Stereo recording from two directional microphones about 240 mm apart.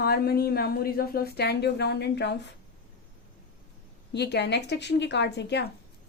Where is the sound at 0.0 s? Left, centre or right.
Left.